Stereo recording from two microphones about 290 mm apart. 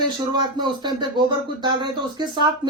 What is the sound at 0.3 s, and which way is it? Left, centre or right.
Speech, centre.